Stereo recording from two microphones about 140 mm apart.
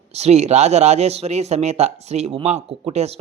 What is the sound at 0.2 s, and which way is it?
Speech, 50° right (ahead or behind).